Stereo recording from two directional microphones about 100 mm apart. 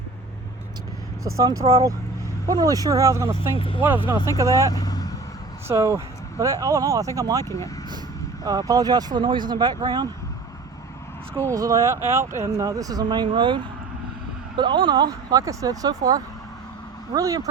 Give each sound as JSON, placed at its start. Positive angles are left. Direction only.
{"t": 1.7, "sound": "speech", "side_deg": -35}
{"t": 3.8, "sound": "speech", "side_deg": -20}
{"t": 4.4, "sound": "speech", "side_deg": -35}
{"t": 4.7, "sound": "vehicle", "side_deg": 40}
{"t": 5.6, "sound": "speech", "side_deg": -30}
{"t": 7.4, "sound": "speech", "side_deg": 30}
{"t": 8.4, "sound": "speech", "side_deg": -40}
{"t": 11.4, "sound": "speech", "side_deg": -35}